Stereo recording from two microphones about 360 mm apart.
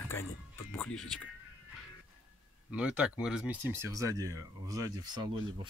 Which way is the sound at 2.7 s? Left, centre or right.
Centre.